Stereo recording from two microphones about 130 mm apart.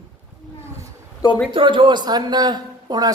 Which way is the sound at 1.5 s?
40° right (ahead or behind).